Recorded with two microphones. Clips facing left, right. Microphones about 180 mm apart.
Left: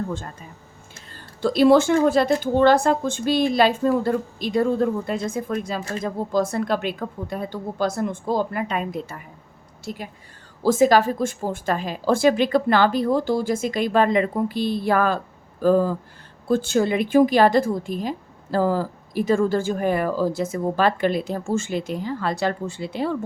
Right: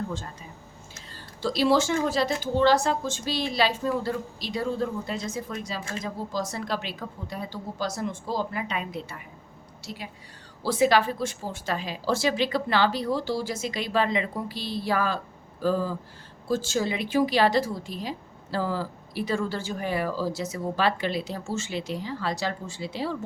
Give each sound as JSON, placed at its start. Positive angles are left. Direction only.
{"t": 1.1, "sound": "a woman's voice", "side_deg": 55}